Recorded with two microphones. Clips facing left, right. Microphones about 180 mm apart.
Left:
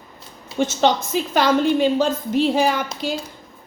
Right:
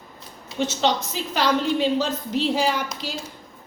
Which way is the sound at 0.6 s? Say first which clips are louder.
Left 4 dB; 50° left (ahead or behind).